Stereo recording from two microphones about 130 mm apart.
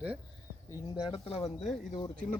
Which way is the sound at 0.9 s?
35° left (ahead or behind).